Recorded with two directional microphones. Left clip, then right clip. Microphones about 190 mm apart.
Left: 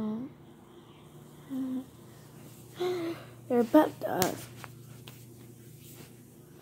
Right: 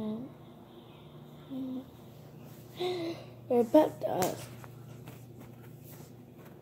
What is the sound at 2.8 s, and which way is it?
Speech, 10° left (ahead or behind).